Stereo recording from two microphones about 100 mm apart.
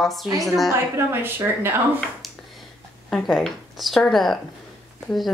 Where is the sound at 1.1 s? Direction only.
20° right (ahead or behind).